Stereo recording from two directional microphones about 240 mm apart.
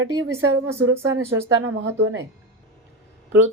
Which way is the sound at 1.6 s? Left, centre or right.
Right.